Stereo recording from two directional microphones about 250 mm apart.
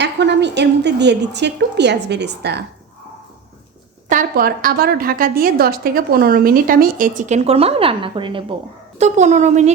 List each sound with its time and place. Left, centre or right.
0.0 s a woman's voice: right
4.1 s a woman's voice: right